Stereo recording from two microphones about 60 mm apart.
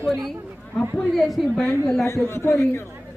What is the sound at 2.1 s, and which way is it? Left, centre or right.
Speech, left.